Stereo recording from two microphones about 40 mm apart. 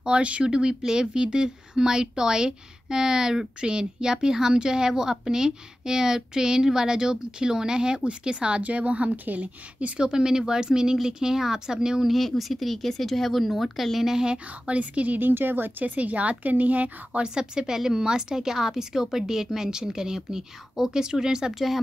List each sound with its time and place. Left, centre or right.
0.0 s a woman's voice: right
9.1 s speech: right
9.4 s a woman's voice: right; by 12.1 s centre
12.1 s speech: centre
13.9 s a woman's voice: centre
14.2 s speech: right
14.8 s a woman's voice: right
15.1 s speech: right
15.8 s a woman's voice: right
17.2 s a woman's voice: centre